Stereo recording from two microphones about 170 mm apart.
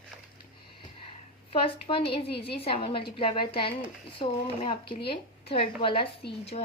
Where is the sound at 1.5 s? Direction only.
30° left (ahead or behind).